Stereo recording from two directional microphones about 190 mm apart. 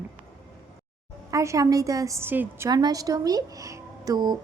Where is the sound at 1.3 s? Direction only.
15° right (ahead or behind).